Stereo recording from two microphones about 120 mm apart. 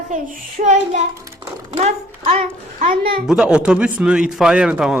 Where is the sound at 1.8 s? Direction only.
70° right (ahead or behind).